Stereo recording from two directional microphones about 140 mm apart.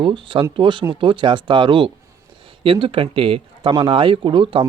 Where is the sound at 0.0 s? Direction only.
40° right (ahead or behind).